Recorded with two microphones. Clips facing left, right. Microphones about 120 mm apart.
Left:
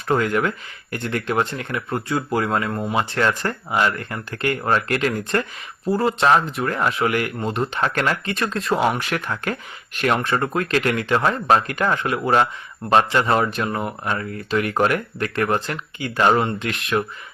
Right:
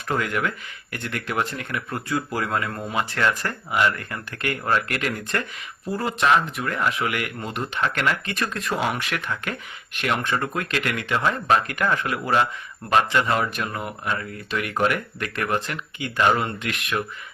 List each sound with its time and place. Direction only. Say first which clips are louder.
0.1 s speech: left 5 dB; 30° left (ahead or behind)